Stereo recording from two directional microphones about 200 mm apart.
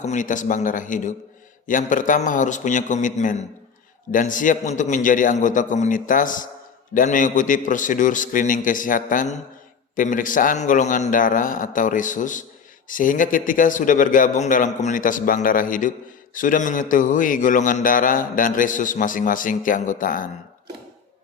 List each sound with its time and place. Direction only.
0.0 s a man's voice: 40° left (ahead or behind)